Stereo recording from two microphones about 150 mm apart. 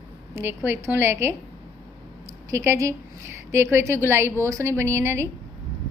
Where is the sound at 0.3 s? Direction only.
15° right (ahead or behind).